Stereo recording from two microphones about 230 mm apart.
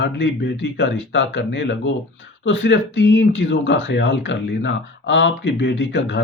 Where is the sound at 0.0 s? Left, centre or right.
Left.